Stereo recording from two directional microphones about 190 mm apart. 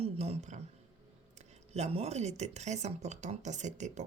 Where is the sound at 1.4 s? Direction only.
35° right (ahead or behind).